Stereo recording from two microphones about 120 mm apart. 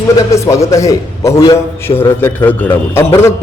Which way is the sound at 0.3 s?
25° left (ahead or behind).